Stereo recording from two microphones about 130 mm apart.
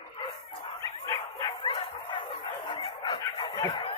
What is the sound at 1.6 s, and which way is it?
Dog, 40° left (ahead or behind).